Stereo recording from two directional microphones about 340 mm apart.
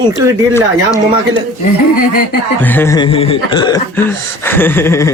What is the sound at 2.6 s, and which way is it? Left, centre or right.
Speech, centre.